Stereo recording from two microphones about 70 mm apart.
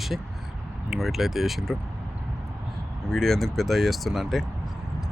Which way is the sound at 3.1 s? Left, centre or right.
Centre.